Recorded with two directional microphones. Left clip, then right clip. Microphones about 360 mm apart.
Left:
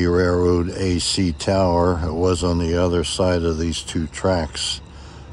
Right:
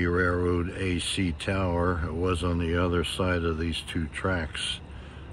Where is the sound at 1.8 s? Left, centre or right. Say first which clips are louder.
Left 9 dB; centre.